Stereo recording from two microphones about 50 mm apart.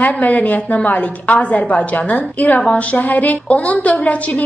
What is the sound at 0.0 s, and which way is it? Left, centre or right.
A woman's voice, left.